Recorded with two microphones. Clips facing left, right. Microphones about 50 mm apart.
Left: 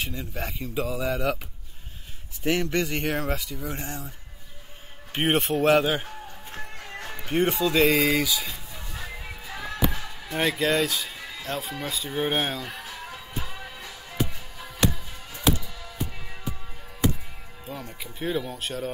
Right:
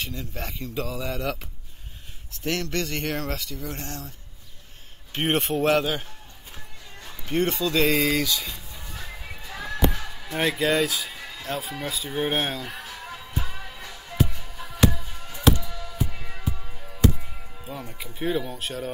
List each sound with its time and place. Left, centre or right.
0.0 s speech: centre
2.4 s speech: centre
5.1 s speech: centre
6.5 s music: left
7.2 s speech: centre
9.5 s music: centre
17.6 s speech: centre